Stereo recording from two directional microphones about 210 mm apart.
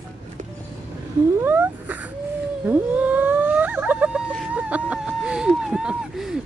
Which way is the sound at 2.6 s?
5° right (ahead or behind).